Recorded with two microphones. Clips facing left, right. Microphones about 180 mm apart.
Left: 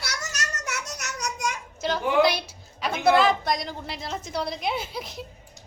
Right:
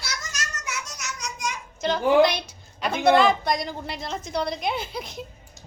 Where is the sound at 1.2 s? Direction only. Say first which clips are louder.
Left 3 dB; 60° left (ahead or behind).